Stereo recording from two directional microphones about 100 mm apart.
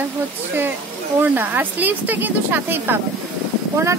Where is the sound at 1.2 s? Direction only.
20° right (ahead or behind).